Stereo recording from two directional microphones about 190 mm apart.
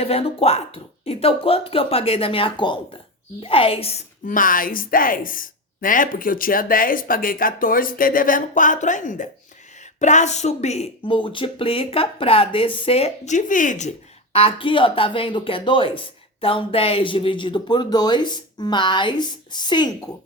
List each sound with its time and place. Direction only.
0.0 s speech: 30° left (ahead or behind)
4.3 s a woman's voice: 45° left (ahead or behind)
14.3 s speech: 30° left (ahead or behind)